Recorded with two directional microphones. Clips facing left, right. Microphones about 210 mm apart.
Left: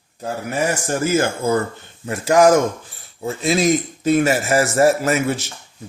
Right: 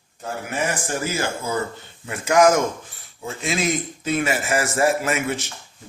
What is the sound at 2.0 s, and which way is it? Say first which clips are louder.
A man's voice: left 3 dB; 40° left (ahead or behind).